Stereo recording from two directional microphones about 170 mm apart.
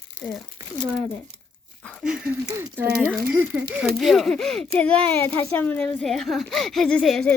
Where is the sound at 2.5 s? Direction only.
15° right (ahead or behind); by 7.4 s 5° left (ahead or behind).